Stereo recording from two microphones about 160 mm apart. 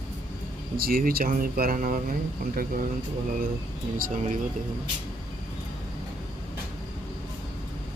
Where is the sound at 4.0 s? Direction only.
60° right (ahead or behind).